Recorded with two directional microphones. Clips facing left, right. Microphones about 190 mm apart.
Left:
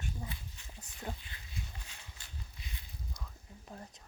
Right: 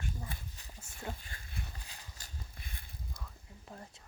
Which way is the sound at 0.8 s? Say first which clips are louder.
Even; 15° left (ahead or behind).